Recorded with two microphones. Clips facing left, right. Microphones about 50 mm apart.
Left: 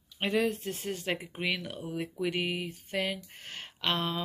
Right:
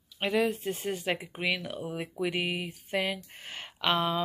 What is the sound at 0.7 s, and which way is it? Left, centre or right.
Speech, centre.